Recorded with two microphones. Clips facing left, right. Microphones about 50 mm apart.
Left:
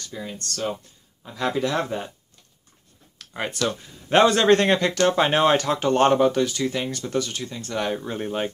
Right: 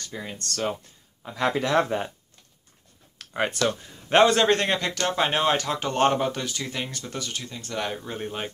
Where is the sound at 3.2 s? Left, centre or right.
Right.